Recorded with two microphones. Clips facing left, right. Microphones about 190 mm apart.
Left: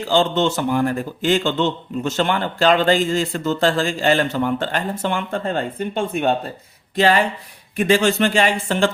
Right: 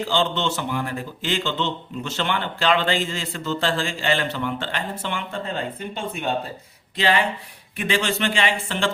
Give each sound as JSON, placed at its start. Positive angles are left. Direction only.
{"t": 0.1, "sound": "speech", "side_deg": 45}
{"t": 6.9, "sound": "speech", "side_deg": 45}